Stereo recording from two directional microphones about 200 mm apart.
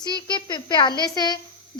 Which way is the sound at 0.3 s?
20° left (ahead or behind).